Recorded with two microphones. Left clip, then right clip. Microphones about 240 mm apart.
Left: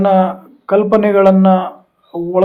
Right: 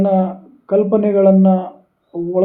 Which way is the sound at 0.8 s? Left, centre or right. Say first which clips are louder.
Left 3 dB; left.